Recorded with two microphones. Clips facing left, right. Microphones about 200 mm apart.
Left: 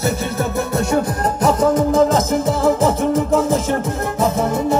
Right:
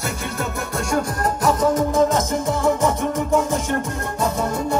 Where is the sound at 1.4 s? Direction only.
30° left (ahead or behind).